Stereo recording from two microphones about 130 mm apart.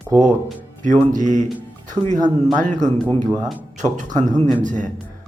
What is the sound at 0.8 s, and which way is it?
Speech, 75° right (ahead or behind).